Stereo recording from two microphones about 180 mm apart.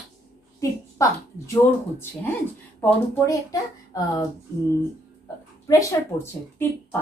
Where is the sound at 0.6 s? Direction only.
15° left (ahead or behind).